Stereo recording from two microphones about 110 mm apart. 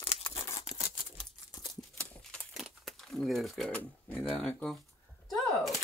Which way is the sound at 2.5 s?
Centre (ahead or behind).